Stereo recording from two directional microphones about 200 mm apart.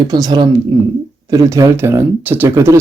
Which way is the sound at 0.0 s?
20° right (ahead or behind).